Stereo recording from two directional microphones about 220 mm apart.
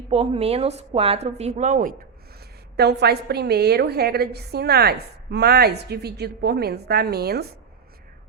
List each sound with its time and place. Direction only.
0.1 s a woman's voice: 25° right (ahead or behind)
2.7 s a woman's voice: 50° right (ahead or behind)